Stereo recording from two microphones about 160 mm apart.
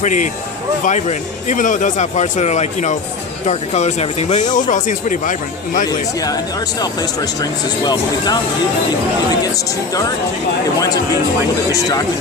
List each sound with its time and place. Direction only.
0.0 s speech: 50° left (ahead or behind)
6.1 s speech: 25° left (ahead or behind)
9.6 s speech: 20° left (ahead or behind)